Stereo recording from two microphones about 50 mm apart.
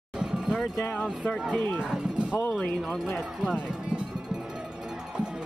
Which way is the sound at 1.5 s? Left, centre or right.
Right.